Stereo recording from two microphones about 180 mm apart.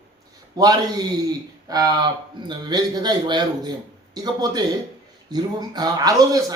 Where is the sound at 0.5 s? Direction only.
20° right (ahead or behind).